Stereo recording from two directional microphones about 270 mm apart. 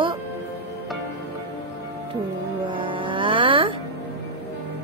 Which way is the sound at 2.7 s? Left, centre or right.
Centre.